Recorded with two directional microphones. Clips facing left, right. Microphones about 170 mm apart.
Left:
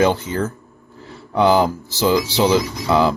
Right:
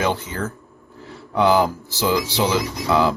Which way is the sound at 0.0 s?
30° left (ahead or behind).